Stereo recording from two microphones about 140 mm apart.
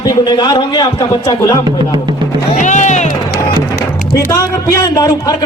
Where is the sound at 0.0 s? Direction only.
30° left (ahead or behind).